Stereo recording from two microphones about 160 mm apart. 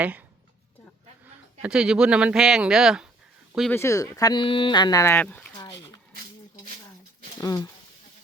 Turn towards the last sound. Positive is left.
turn(degrees=20)  # may be behind; listen again after turning